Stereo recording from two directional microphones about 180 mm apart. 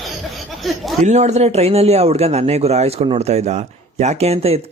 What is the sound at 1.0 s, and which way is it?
Speech, 40° right (ahead or behind).